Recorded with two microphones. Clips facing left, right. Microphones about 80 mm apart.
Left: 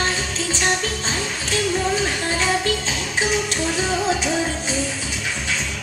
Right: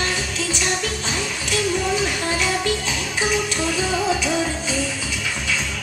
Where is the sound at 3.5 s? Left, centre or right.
Left.